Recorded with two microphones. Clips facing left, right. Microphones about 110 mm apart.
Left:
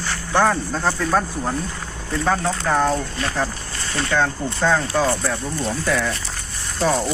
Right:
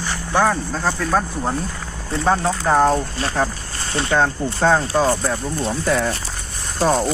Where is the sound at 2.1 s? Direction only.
25° right (ahead or behind).